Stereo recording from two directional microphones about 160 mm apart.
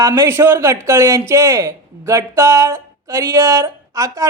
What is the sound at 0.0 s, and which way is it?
Speech, 20° right (ahead or behind).